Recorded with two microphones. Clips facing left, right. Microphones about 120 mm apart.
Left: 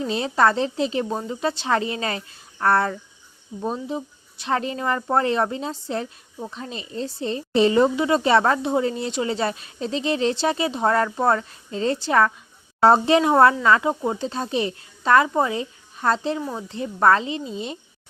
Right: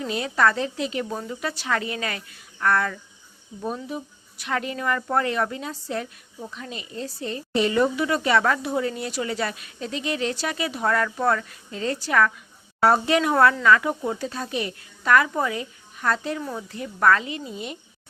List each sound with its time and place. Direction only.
0.0 s a woman's voice: 30° left (ahead or behind)